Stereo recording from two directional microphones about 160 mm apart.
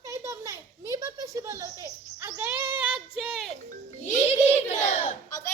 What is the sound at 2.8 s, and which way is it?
Female singing, 5° right (ahead or behind).